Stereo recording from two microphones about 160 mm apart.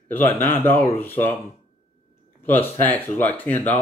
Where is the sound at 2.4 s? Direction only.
10° left (ahead or behind).